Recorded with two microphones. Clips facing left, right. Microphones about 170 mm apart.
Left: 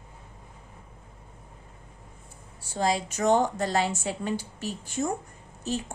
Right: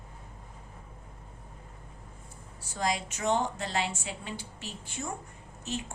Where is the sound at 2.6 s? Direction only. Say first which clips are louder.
Left 5 dB; 30° left (ahead or behind).